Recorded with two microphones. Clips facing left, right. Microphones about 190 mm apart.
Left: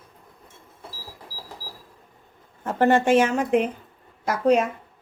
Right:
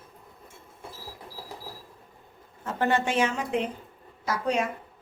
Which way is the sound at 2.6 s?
50° left (ahead or behind).